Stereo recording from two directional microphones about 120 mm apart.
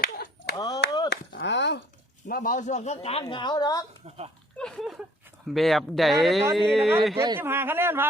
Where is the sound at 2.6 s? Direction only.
80° left; by 3.3 s 55° left (ahead or behind).